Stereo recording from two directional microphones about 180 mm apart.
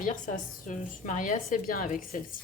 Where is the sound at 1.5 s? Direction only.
55° left (ahead or behind).